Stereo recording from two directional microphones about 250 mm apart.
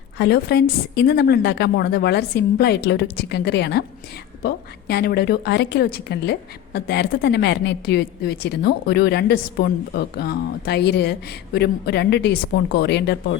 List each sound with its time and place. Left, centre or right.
0.2 s a woman's voice: left